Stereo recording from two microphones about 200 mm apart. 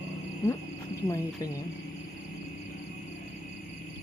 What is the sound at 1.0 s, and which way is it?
Speech, 20° left (ahead or behind).